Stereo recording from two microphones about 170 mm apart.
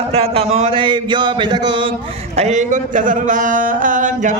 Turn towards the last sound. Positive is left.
turn(degrees=-50)  # may be behind; listen again after turning